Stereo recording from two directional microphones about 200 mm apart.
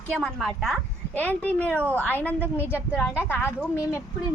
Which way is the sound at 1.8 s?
10° right (ahead or behind).